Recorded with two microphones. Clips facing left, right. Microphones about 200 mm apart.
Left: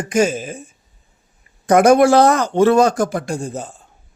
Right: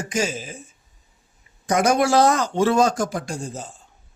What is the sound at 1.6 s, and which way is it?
Speech, 55° left (ahead or behind).